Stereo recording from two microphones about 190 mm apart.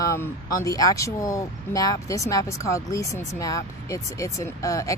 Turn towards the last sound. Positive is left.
turn(degrees=15)  # may be behind; listen again after turning